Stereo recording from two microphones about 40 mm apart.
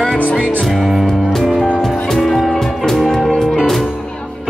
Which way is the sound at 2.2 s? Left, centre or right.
Centre.